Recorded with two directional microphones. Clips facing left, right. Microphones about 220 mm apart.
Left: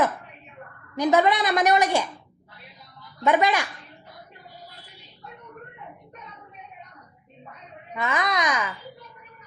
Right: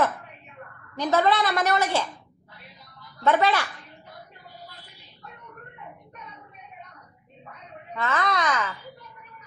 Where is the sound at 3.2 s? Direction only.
15° left (ahead or behind).